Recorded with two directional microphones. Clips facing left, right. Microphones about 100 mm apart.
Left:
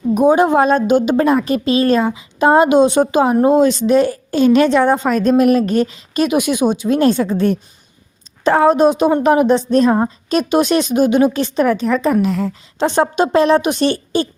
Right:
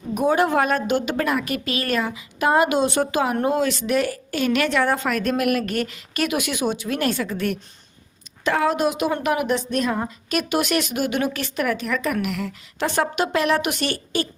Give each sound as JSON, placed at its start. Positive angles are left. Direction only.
{"t": 0.1, "sound": "a woman's voice", "side_deg": 20}